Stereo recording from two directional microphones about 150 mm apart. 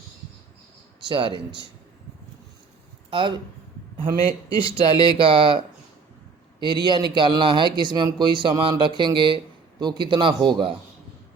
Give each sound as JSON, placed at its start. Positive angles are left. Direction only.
{"t": 1.0, "sound": "a man's voice", "side_deg": -30}
{"t": 3.1, "sound": "a man's voice", "side_deg": -35}
{"t": 4.6, "sound": "a man's voice", "side_deg": -35}